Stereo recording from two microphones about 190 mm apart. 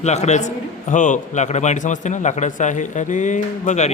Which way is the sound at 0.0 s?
35° left (ahead or behind).